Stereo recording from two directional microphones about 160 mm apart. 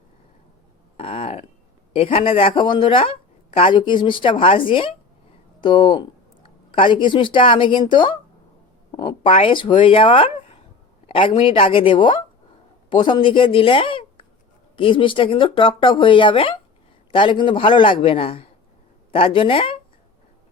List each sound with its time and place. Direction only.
0.9 s speech: 35° left (ahead or behind)